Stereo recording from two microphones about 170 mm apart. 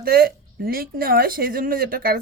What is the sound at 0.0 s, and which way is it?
Speech, 60° right (ahead or behind).